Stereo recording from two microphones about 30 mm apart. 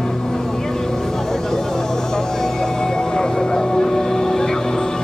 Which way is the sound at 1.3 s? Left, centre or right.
Centre.